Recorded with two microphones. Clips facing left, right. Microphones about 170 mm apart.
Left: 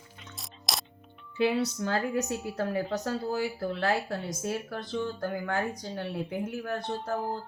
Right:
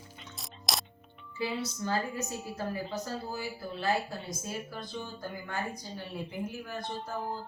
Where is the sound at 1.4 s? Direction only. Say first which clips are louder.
Left 7 dB; 65° left (ahead or behind).